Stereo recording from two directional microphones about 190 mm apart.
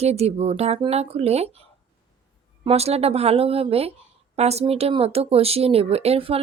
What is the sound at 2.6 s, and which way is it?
Speech, 35° right (ahead or behind).